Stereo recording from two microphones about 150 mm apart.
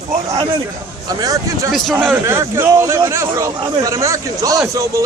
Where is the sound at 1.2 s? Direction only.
25° right (ahead or behind).